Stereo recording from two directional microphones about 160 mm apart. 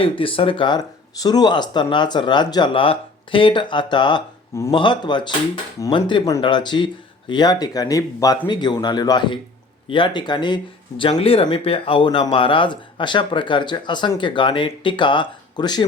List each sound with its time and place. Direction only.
0.0 s speech: 35° left (ahead or behind)